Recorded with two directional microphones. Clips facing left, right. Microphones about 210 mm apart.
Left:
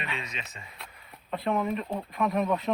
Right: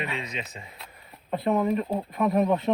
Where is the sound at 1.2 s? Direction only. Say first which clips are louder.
Right 4 dB; 20° right (ahead or behind).